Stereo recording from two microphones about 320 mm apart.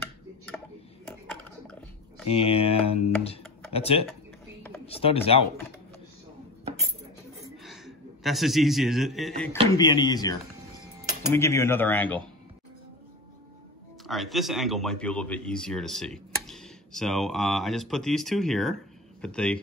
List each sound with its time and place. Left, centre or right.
1.7 s a sound: centre
2.3 s speech: centre
7.4 s a man's voice: centre
9.8 s speech: centre
14.0 s speech: centre